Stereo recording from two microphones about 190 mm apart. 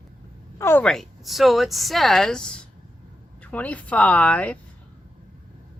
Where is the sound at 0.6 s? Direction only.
10° left (ahead or behind).